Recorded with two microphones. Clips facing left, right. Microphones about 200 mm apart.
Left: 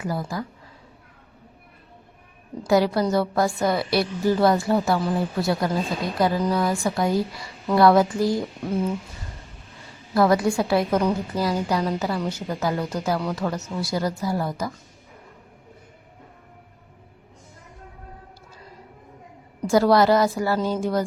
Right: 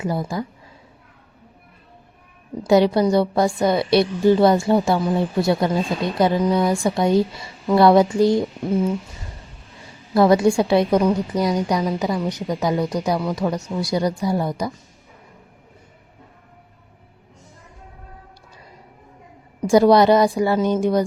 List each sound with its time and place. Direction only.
0.0 s speech: 20° right (ahead or behind)
2.6 s speech: 20° right (ahead or behind)
10.2 s a woman's voice: 25° right (ahead or behind)
19.7 s speech: 20° right (ahead or behind)